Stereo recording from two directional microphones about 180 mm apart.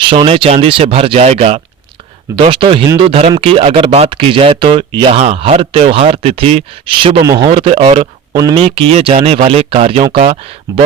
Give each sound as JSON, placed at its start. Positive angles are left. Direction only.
{"t": 0.0, "sound": "speech", "side_deg": -30}
{"t": 8.4, "sound": "speech", "side_deg": -25}